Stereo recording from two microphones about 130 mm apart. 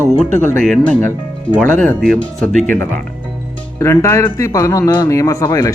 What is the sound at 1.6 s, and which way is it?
Speech, 10° left (ahead or behind).